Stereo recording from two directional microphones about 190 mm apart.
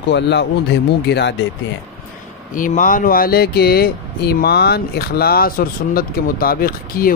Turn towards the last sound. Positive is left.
turn(degrees=50)  # may be behind; listen again after turning